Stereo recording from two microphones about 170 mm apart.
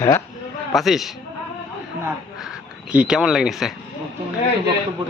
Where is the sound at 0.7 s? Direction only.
Centre (ahead or behind).